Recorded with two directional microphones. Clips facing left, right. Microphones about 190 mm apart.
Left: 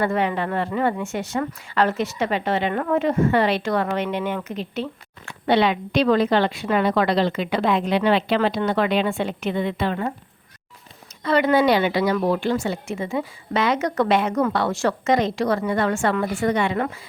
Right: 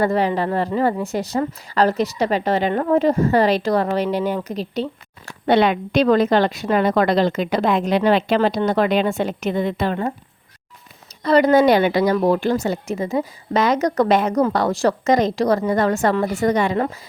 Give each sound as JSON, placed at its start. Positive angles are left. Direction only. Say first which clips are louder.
{"t": 0.0, "sound": "a woman's voice", "louder": "right 3 dB", "side_deg": -35}
{"t": 11.2, "sound": "a woman's voice", "louder": "right 4 dB", "side_deg": -40}